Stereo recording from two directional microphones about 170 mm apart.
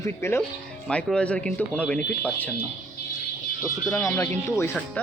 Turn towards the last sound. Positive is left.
turn(degrees=15)  # may be behind; listen again after turning